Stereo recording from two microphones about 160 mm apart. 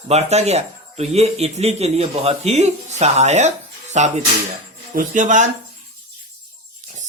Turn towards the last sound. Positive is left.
turn(degrees=-50)  # may be behind; listen again after turning